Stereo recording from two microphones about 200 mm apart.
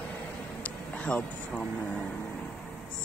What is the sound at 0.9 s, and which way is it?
Speech, 5° left (ahead or behind).